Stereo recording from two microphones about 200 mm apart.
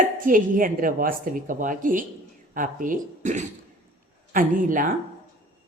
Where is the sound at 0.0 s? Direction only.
40° right (ahead or behind).